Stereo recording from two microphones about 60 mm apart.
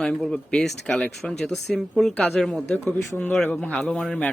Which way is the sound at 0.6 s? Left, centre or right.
Centre.